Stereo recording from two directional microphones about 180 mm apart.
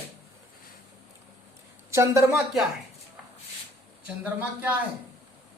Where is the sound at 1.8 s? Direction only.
15° right (ahead or behind).